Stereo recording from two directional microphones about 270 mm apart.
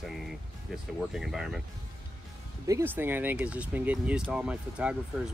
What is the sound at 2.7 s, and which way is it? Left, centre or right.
Speech, centre.